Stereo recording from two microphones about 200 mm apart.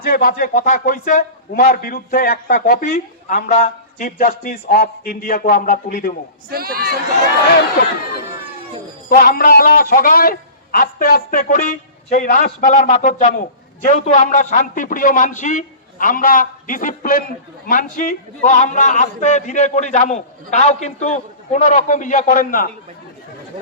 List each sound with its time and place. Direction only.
0.0 s a man's voice: 45° left (ahead or behind)
6.5 s speech: 50° right (ahead or behind)
9.0 s a man's voice: 45° left (ahead or behind)